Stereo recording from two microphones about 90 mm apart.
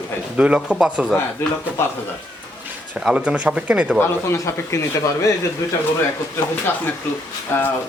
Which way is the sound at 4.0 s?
30° left (ahead or behind).